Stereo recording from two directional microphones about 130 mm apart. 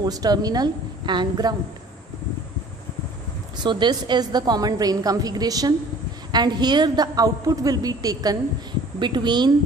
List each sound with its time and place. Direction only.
0.0 s a woman's voice: 30° right (ahead or behind)
3.6 s a woman's voice: 35° right (ahead or behind)